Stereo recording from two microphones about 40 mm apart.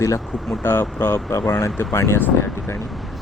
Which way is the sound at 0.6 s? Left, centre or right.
Left.